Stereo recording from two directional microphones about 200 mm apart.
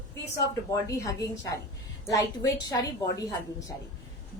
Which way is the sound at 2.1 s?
15° left (ahead or behind).